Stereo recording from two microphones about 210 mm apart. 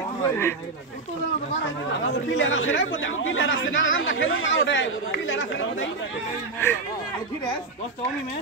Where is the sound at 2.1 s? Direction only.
60° left (ahead or behind).